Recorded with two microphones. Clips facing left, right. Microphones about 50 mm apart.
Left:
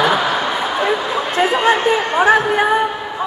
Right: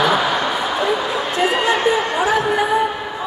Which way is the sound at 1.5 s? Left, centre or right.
Left.